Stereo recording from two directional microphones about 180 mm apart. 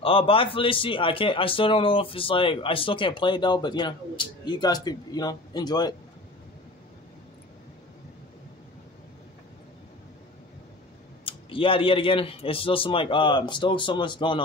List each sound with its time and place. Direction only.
0.0 s a man's voice: 30° left (ahead or behind)
11.2 s a man's voice: 30° left (ahead or behind)